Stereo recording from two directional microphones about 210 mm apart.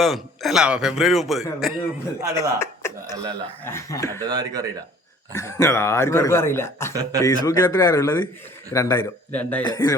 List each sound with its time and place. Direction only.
0.0 s a man's voice: centre (ahead or behind)
2.2 s speech: 15° right (ahead or behind)
3.6 s speech: 10° left (ahead or behind)
4.3 s speech: 20° right (ahead or behind)
5.3 s speech: 15° left (ahead or behind)
6.9 s speech: 15° right (ahead or behind)
7.4 s speech: 15° left (ahead or behind)
9.6 s a man's voice: 20° left (ahead or behind)